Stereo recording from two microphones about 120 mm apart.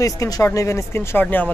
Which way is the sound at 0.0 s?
25° left (ahead or behind).